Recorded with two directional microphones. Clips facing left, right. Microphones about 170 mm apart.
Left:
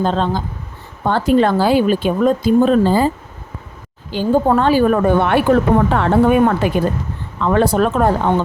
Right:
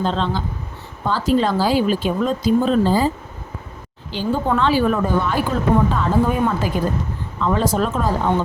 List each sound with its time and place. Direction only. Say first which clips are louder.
0.0 s speech: left 4 dB; 50° left (ahead or behind)
1.0 s a woman's voice: left 4 dB; 60° left (ahead or behind)
4.1 s a woman's voice: left 6 dB; 45° left (ahead or behind); by 8.1 s 65° left (ahead or behind)